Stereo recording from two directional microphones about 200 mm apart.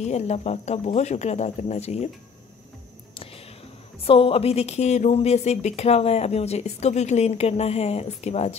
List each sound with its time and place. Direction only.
0.0 s a woman's voice: 35° left (ahead or behind)
4.0 s a woman's voice: 30° left (ahead or behind)